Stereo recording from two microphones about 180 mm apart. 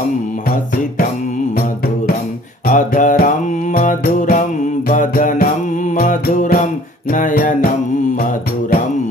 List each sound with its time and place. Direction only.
2.6 s music: 50° left (ahead or behind)